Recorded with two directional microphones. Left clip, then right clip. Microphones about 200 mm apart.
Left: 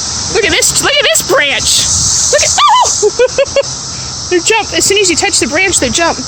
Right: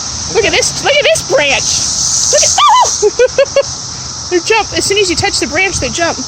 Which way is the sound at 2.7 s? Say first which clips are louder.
Even; 5° right (ahead or behind).